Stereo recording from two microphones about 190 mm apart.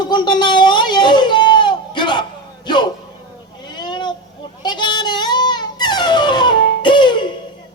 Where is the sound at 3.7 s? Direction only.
25° left (ahead or behind).